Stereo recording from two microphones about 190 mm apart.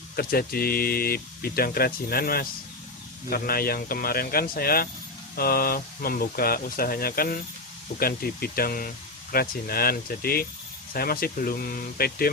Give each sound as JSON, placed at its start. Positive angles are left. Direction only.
{"t": 0.2, "sound": "speech", "side_deg": 50}